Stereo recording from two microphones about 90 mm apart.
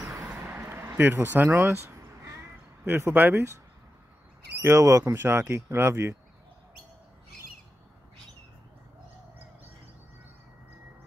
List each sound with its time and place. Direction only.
0.5 s a sound: 20° right (ahead or behind)
0.9 s speech: 25° right (ahead or behind)
4.6 s speech: 35° right (ahead or behind)
5.1 s speech: 25° right (ahead or behind)